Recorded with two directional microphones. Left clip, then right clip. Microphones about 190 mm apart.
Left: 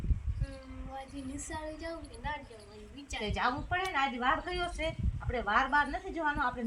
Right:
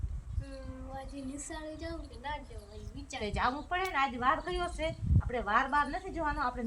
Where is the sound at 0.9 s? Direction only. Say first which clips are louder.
Left 1 dB; centre (ahead or behind).